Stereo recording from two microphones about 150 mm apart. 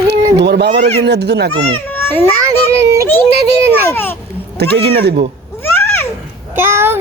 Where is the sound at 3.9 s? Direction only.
15° left (ahead or behind).